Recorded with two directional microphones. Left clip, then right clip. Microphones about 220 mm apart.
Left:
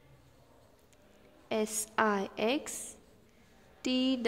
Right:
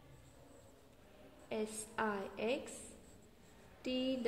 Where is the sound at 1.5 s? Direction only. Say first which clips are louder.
Left 9 dB; 35° left (ahead or behind).